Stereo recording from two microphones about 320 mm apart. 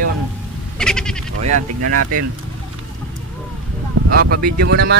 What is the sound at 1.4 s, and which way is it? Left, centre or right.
Speech, right.